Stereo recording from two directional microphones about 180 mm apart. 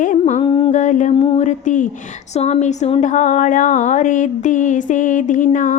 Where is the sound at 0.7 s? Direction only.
45° left (ahead or behind).